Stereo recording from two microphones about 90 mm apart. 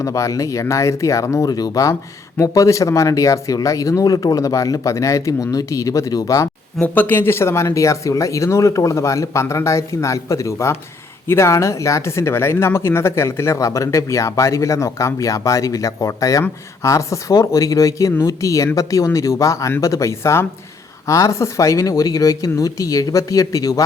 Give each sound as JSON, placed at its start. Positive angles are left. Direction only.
{"t": 0.0, "sound": "speech", "side_deg": 35}
{"t": 1.5, "sound": "speech", "side_deg": 45}
{"t": 6.8, "sound": "speech", "side_deg": 20}